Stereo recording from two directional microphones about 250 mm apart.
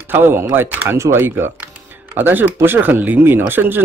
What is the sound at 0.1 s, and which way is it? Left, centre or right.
Speech, centre.